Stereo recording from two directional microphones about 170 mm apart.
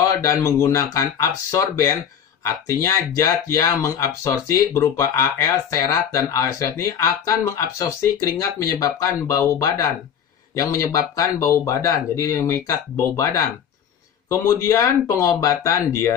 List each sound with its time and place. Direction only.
0.0 s speech: 20° left (ahead or behind)